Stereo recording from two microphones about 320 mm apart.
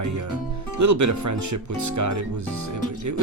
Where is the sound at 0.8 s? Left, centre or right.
Right.